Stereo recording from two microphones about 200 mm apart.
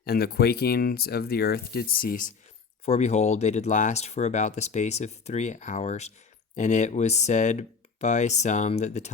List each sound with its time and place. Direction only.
0.0 s speech: 50° left (ahead or behind)
2.8 s speech: 35° left (ahead or behind)